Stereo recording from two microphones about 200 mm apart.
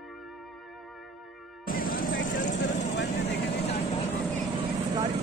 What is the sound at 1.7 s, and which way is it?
Music, 45° left (ahead or behind).